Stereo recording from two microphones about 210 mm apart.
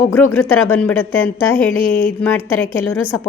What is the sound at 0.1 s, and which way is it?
A woman's voice, 10° left (ahead or behind).